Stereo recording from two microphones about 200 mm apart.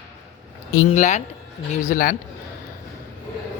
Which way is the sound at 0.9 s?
40° left (ahead or behind).